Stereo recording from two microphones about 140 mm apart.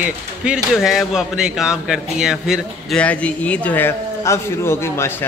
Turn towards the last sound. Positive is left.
turn(degrees=15)  # may be behind; listen again after turning